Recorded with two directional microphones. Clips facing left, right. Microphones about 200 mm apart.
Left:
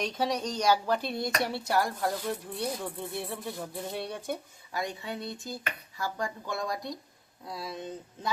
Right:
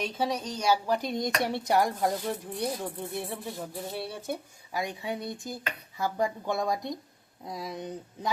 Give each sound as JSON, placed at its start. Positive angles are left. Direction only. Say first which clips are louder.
{"t": 0.0, "sound": "speech", "louder": "even", "side_deg": -5}